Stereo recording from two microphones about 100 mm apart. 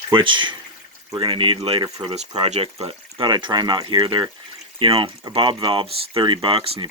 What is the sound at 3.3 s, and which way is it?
Speech, 50° right (ahead or behind).